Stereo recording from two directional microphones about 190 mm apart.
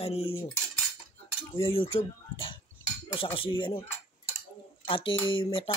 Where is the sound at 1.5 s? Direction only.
30° left (ahead or behind).